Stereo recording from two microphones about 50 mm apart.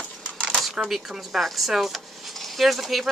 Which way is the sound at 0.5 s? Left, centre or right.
Centre.